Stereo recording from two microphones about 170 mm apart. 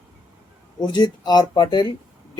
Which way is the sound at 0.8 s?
25° left (ahead or behind).